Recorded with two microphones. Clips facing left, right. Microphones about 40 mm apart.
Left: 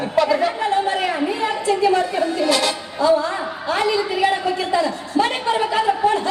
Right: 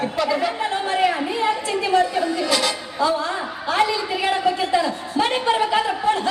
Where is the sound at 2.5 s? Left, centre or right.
Centre.